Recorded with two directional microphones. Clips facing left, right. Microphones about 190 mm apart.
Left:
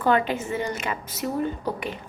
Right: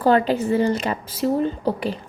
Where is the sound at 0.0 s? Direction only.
35° right (ahead or behind).